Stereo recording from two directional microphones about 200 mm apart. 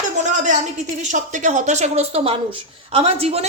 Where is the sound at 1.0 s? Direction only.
35° right (ahead or behind).